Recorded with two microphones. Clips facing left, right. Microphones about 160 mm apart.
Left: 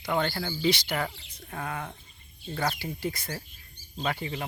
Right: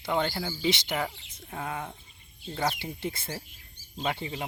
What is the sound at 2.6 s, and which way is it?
Speech, 20° right (ahead or behind).